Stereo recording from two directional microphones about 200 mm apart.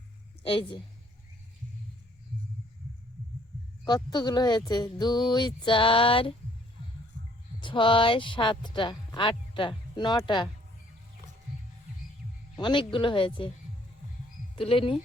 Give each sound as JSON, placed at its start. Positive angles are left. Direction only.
{"t": 0.4, "sound": "speech", "side_deg": 25}
{"t": 3.8, "sound": "speech", "side_deg": 20}
{"t": 7.6, "sound": "speech", "side_deg": 25}
{"t": 12.5, "sound": "speech", "side_deg": 25}
{"t": 14.6, "sound": "speech", "side_deg": 25}